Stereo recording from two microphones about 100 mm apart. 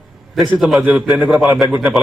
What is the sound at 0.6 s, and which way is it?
A man's voice, centre (ahead or behind).